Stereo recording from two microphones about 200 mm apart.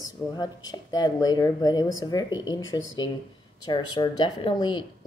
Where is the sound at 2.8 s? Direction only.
75° left (ahead or behind).